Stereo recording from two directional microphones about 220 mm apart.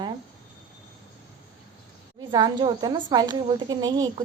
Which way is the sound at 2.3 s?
20° right (ahead or behind).